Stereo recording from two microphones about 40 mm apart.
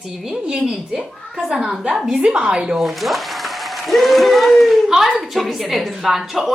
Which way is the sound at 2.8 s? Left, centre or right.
Centre.